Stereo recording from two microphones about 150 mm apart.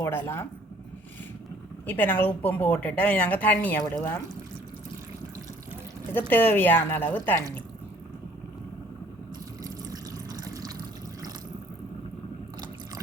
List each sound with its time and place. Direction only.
0.0 s speech: 15° left (ahead or behind)
1.9 s speech: 10° left (ahead or behind)
6.1 s speech: 15° left (ahead or behind)
9.6 s water: 25° right (ahead or behind)